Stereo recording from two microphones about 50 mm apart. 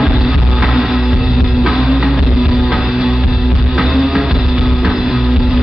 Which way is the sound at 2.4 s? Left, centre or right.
Centre.